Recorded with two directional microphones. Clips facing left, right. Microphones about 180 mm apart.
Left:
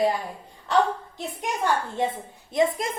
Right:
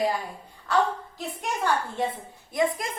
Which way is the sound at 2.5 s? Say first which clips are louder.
Left 3 dB; 25° left (ahead or behind).